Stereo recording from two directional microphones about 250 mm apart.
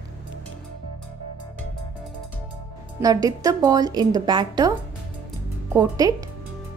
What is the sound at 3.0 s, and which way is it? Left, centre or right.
A woman's voice, centre.